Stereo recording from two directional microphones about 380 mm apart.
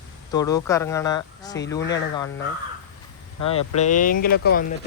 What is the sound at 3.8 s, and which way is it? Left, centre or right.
Speech, centre.